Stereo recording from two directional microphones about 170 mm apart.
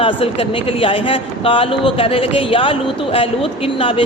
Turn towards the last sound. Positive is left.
turn(degrees=35)  # may be behind; listen again after turning